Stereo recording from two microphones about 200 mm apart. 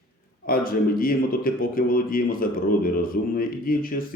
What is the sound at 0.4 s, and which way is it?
A man's voice, 45° left (ahead or behind).